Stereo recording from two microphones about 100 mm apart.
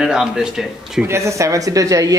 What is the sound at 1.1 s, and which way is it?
Speech, 30° right (ahead or behind).